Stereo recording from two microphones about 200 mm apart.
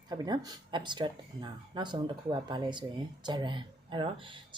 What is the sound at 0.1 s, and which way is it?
Speech, 20° right (ahead or behind).